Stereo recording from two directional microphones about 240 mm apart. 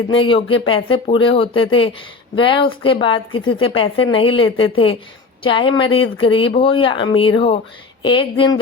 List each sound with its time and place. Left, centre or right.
0.1 s speech: left